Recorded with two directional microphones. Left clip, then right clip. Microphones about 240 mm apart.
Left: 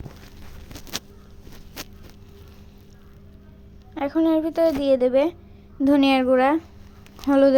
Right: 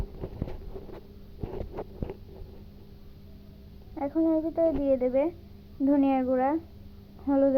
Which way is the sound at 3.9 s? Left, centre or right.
Left.